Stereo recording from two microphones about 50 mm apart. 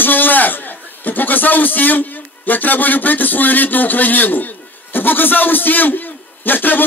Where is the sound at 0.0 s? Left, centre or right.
Left.